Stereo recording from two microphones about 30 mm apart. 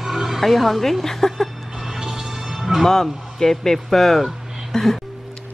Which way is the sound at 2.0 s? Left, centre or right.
Centre.